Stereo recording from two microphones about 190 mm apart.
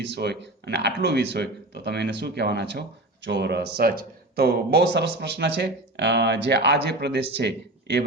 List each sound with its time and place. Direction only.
0.0 s speech: 65° right (ahead or behind)